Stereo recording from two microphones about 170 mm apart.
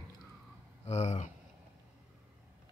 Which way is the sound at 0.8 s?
40° left (ahead or behind).